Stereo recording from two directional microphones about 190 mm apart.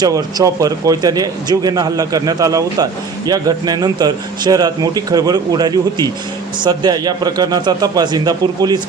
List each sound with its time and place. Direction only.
0.0 s a man's voice: 20° right (ahead or behind)